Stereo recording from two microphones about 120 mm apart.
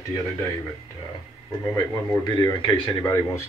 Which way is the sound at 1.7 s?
35° left (ahead or behind).